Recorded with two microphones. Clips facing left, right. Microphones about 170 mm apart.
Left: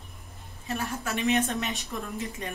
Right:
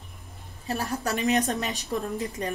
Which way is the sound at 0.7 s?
35° right (ahead or behind).